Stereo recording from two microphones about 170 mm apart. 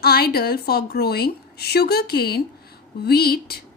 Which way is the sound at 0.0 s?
65° left (ahead or behind).